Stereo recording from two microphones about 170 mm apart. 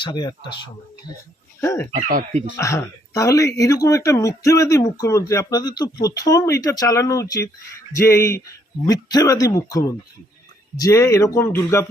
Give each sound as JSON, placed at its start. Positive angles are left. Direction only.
{"t": 0.0, "sound": "speech", "side_deg": 25}
{"t": 2.0, "sound": "speech", "side_deg": -50}
{"t": 2.6, "sound": "speech", "side_deg": 15}